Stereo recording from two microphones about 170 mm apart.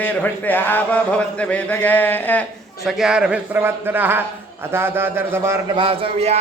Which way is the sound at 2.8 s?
5° right (ahead or behind).